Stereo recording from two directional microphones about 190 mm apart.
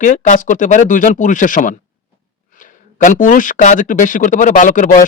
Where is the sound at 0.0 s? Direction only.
40° left (ahead or behind).